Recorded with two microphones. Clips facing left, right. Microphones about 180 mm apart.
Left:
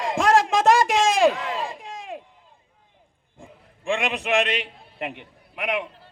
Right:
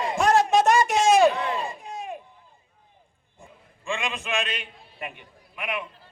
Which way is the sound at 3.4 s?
65° left (ahead or behind).